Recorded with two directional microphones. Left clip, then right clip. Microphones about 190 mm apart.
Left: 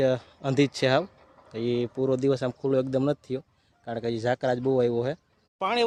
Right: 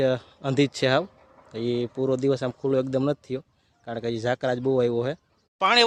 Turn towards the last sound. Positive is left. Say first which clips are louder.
# right 7 dB
turn(degrees=0)  # may be behind; listen again after turning